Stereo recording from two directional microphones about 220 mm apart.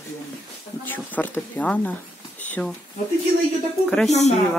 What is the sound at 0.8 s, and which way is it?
Speech, 10° left (ahead or behind).